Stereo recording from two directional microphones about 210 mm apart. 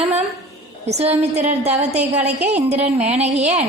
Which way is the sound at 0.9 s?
30° right (ahead or behind).